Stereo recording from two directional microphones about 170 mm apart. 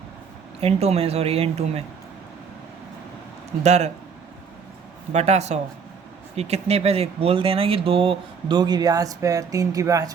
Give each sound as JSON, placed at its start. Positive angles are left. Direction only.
{"t": 0.6, "sound": "speech", "side_deg": -35}
{"t": 3.6, "sound": "speech", "side_deg": -40}
{"t": 5.1, "sound": "speech", "side_deg": -40}